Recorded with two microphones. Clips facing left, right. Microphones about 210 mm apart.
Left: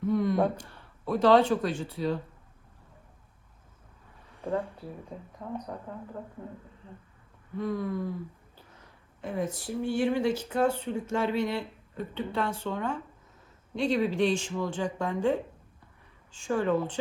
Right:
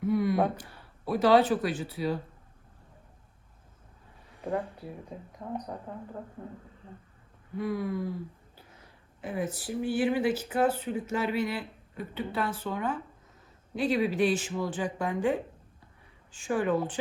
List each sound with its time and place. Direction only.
0.1 s speech: 5° right (ahead or behind)
4.4 s a sound: 10° right (ahead or behind)
5.4 s speech: 15° right (ahead or behind)
7.6 s speech: 10° right (ahead or behind)
16.4 s speech: 15° right (ahead or behind)